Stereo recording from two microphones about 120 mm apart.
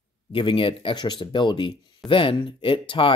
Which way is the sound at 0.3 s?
45° left (ahead or behind).